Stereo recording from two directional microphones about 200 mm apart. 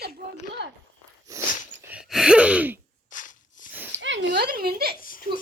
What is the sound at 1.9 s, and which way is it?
Gasp, 5° right (ahead or behind).